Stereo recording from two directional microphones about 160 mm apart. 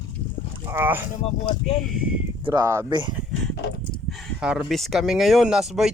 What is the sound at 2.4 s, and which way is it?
Speech, 25° right (ahead or behind).